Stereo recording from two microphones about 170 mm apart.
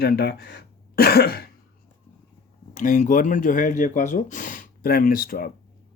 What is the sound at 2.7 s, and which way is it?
Speech, 50° left (ahead or behind).